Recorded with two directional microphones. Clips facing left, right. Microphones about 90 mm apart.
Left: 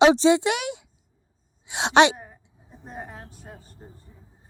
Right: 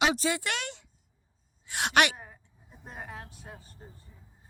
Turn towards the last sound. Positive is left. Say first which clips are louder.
# left 4 dB
turn(degrees=30)  # may be behind; listen again after turning